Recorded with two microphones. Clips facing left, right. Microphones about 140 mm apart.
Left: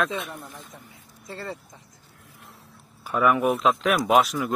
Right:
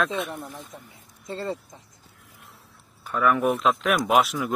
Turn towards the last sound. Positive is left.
turn(degrees=0)  # may be behind; listen again after turning